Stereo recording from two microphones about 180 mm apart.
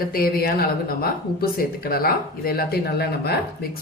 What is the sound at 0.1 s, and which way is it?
Speech, 55° left (ahead or behind).